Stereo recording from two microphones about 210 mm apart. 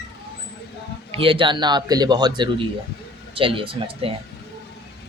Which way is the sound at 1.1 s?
25° right (ahead or behind).